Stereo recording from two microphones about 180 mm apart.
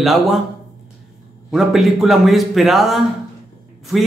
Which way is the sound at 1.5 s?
Centre (ahead or behind).